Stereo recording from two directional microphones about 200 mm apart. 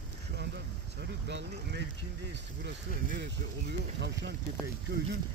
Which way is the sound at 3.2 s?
60° right (ahead or behind).